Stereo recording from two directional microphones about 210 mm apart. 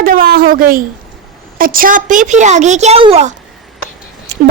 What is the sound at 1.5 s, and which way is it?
A woman's voice, 45° right (ahead or behind).